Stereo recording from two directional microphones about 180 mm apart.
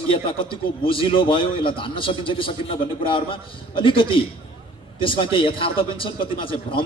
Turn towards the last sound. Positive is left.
turn(degrees=30)  # may be behind; listen again after turning